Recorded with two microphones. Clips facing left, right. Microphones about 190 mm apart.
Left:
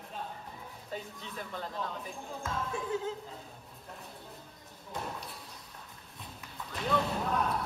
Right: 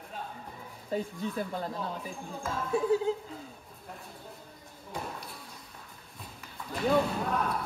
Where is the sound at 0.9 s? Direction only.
45° right (ahead or behind).